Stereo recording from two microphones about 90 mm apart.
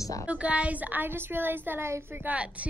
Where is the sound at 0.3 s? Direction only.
15° right (ahead or behind).